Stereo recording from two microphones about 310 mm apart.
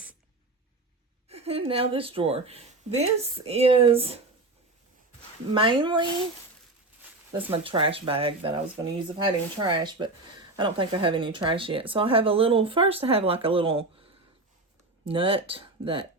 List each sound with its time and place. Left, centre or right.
1.3 s a woman's voice: centre
5.5 s speech: centre
7.3 s speech: centre
15.0 s speech: centre